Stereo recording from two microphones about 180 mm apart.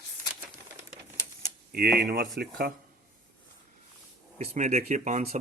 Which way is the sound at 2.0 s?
60° right (ahead or behind).